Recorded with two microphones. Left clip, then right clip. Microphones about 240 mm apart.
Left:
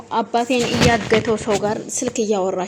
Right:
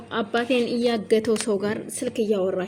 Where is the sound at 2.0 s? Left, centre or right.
Centre.